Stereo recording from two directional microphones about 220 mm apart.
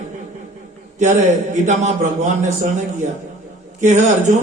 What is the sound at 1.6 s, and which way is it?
A man's voice, 35° right (ahead or behind).